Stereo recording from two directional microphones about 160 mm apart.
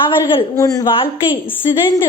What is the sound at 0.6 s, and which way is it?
A woman's voice, 20° left (ahead or behind).